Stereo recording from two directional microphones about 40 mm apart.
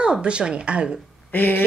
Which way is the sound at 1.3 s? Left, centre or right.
Left.